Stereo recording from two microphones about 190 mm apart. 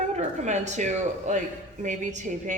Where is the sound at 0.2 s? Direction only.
40° right (ahead or behind).